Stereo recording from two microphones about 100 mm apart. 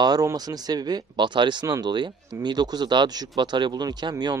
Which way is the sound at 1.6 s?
35° right (ahead or behind).